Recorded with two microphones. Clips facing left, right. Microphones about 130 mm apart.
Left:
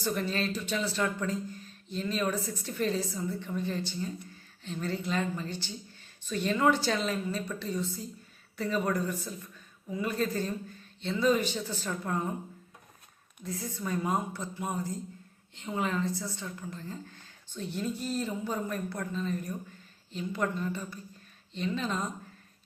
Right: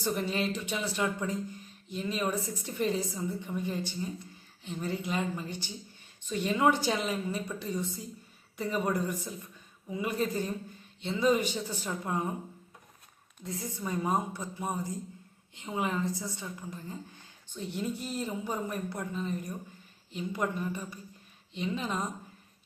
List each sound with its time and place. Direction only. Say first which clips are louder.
0.0 s speech: even; 15° right (ahead or behind)
13.4 s speech: left 1 dB; 20° right (ahead or behind)